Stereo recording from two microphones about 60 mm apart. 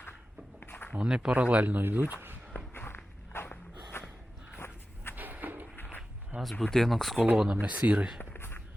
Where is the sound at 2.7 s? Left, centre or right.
Left.